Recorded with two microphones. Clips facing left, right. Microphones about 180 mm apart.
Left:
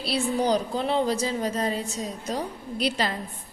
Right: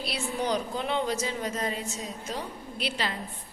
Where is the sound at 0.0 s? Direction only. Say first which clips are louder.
Left 6 dB; 35° left (ahead or behind).